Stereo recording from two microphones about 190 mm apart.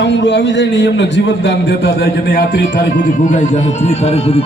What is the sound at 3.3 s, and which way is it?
Speech, 40° left (ahead or behind).